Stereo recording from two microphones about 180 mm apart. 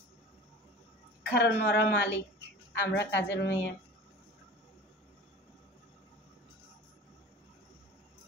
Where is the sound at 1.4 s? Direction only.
70° left (ahead or behind).